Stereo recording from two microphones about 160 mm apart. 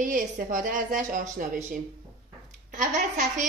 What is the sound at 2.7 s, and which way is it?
Speech, 55° right (ahead or behind).